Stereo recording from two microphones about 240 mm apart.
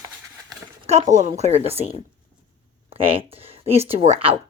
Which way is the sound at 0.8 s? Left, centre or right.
Right.